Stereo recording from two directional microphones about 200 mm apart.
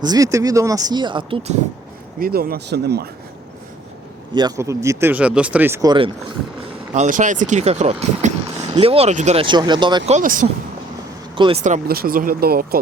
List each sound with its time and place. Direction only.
0.0 s speech: 20° right (ahead or behind)
2.1 s speech: 45° right (ahead or behind)
4.4 s speech: 15° right (ahead or behind)
6.9 s speech: 35° right (ahead or behind)
10.1 s speech: 40° right (ahead or behind)
11.3 s speech: 25° right (ahead or behind)
11.6 s speech: 45° right (ahead or behind)